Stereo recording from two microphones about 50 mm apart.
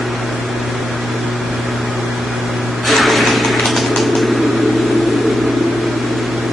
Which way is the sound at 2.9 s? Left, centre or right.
Centre.